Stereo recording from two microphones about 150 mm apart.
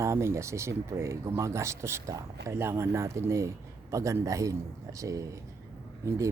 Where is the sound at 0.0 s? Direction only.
20° right (ahead or behind).